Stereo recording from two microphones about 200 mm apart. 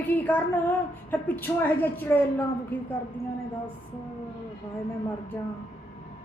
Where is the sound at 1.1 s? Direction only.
10° left (ahead or behind).